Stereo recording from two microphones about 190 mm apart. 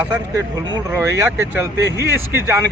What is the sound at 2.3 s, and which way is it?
Speech, 15° right (ahead or behind).